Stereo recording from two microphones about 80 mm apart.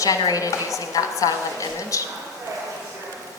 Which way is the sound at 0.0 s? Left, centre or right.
Left.